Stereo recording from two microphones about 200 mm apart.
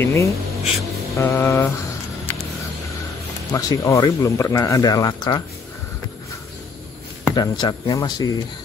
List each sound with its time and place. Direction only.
0.0 s speech: 15° left (ahead or behind)
3.5 s speech: 15° left (ahead or behind)
7.2 s speech: 20° left (ahead or behind)